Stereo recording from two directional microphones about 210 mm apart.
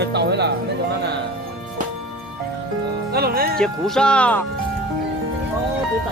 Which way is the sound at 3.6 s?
5° left (ahead or behind).